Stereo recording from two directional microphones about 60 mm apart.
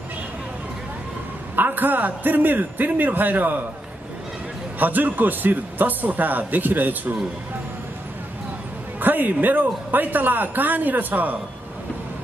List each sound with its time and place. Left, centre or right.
1.6 s speech: right
4.7 s a man's voice: right
9.0 s speech: right